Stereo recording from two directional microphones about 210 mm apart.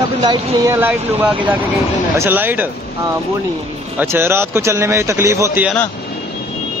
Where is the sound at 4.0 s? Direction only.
10° right (ahead or behind).